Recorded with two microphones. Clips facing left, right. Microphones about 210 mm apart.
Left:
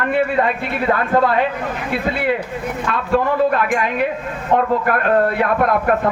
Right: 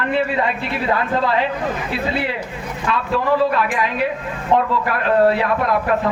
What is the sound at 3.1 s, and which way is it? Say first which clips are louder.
A man's voice: left 2 dB; 50° left (ahead or behind).